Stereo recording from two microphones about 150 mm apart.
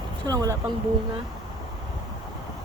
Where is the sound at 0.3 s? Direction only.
25° right (ahead or behind).